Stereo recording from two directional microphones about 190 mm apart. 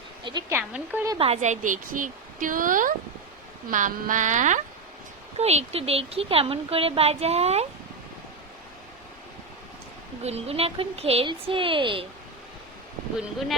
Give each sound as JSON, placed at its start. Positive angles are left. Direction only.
{"t": 0.3, "sound": "speech", "side_deg": -25}
{"t": 0.5, "sound": "speech", "side_deg": -10}
{"t": 1.2, "sound": "speech", "side_deg": -35}
{"t": 10.2, "sound": "speech", "side_deg": -35}